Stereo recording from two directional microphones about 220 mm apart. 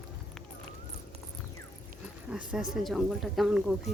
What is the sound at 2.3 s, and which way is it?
Speech, 5° right (ahead or behind).